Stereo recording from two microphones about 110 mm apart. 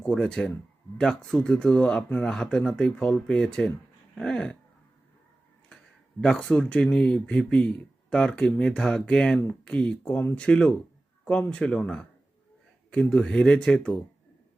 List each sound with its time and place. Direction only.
0.0 s speech: 10° left (ahead or behind)
5.6 s speech: 5° left (ahead or behind)